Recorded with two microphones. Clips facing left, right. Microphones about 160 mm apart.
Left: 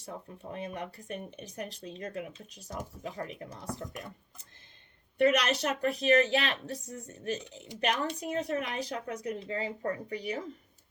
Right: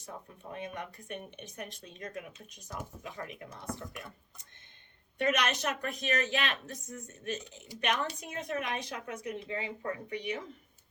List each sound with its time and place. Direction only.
0.5 s speech: 35° left (ahead or behind)
5.1 s speech: 35° left (ahead or behind)